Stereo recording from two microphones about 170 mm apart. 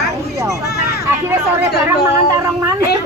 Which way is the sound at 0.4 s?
20° right (ahead or behind).